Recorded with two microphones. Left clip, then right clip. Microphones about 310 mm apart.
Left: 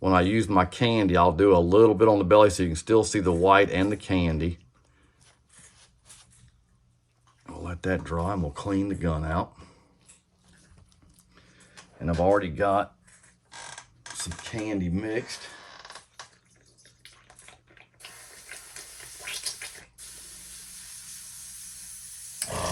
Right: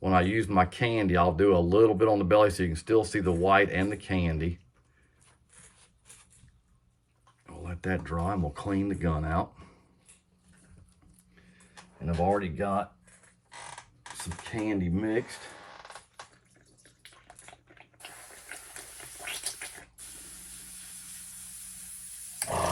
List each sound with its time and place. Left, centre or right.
0.0 s speech: centre
7.4 s speech: centre
12.0 s speech: centre
14.5 s speech: centre